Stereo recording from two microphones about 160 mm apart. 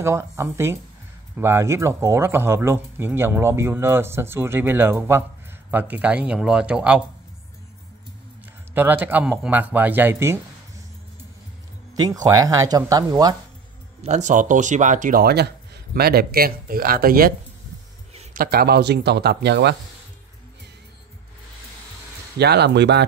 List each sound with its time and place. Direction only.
0.0 s speech: 15° right (ahead or behind)
8.7 s speech: 10° right (ahead or behind)
11.9 s speech: 25° right (ahead or behind)
14.0 s speech: 45° right (ahead or behind); by 17.3 s 65° right (ahead or behind)
18.3 s speech: 65° right (ahead or behind); by 19.7 s 90° right
22.4 s speech: 90° right